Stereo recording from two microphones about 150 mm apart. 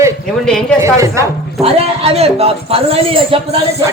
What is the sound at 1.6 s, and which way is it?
A man's voice, 45° right (ahead or behind).